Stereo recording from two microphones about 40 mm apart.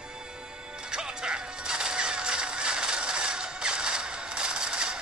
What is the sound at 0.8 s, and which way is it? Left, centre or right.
Music, centre.